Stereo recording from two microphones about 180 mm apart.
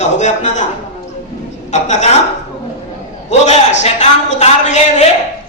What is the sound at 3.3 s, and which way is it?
A man's voice, 40° left (ahead or behind).